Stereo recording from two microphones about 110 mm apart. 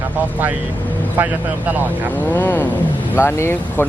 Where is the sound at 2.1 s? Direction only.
15° left (ahead or behind).